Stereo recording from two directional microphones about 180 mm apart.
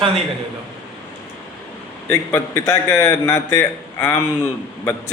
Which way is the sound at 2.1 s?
15° left (ahead or behind).